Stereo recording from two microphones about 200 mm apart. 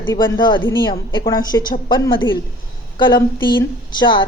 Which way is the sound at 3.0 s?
25° left (ahead or behind).